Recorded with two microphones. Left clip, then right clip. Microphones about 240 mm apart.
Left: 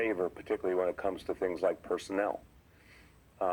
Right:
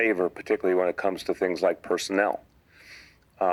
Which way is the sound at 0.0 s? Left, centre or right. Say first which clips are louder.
Right 8 dB; right.